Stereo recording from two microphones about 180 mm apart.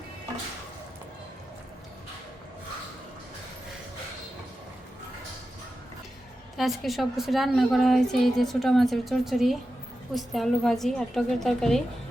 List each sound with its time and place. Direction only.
6.6 s a woman's voice: centre (ahead or behind)